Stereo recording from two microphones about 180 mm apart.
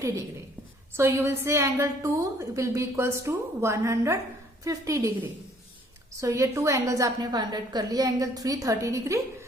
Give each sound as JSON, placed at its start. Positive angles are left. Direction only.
{"t": 0.9, "sound": "a woman's voice", "side_deg": -15}